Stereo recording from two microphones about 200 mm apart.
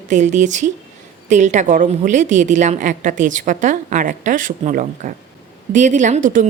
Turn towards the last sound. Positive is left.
turn(degrees=-40)  # may be behind; listen again after turning